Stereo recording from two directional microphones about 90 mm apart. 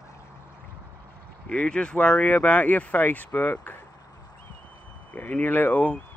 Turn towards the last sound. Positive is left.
turn(degrees=20)  # may be behind; listen again after turning